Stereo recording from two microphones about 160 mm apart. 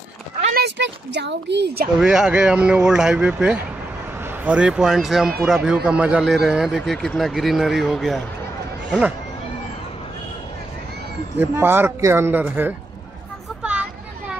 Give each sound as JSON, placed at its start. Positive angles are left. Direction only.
{"t": 0.6, "sound": "speech", "side_deg": -90}
{"t": 2.0, "sound": "a man's voice", "side_deg": -5}
{"t": 11.3, "sound": "speech", "side_deg": -15}
{"t": 13.6, "sound": "a sound", "side_deg": -10}